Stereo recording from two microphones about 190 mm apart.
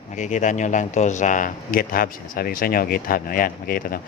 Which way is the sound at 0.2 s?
40° left (ahead or behind).